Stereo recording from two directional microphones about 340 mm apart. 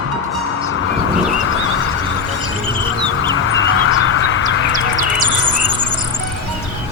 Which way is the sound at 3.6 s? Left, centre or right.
Left.